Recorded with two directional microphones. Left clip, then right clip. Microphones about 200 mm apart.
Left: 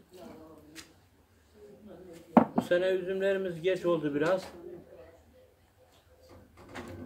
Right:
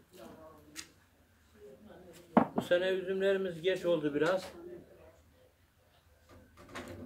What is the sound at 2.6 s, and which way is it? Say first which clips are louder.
A man's voice: left 3 dB; centre (ahead or behind).